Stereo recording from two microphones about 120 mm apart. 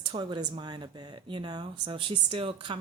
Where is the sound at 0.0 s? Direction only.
40° right (ahead or behind).